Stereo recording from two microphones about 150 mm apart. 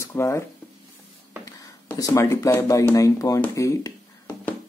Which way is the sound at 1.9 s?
20° left (ahead or behind).